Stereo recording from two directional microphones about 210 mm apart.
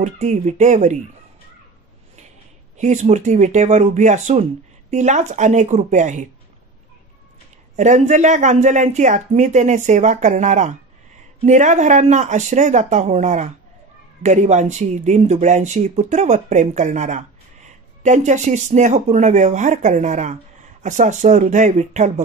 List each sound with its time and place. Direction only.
0.0 s speech: 35° right (ahead or behind)
2.8 s speech: 35° right (ahead or behind)
7.7 s speech: 35° right (ahead or behind)